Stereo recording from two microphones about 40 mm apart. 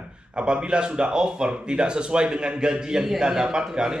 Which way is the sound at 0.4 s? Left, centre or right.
Right.